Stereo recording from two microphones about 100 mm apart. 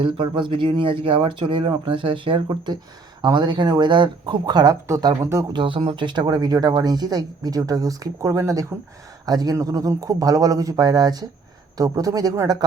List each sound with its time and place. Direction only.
0.0 s speech: 55° right (ahead or behind); by 5.3 s 35° right (ahead or behind)
5.5 s speech: 55° right (ahead or behind)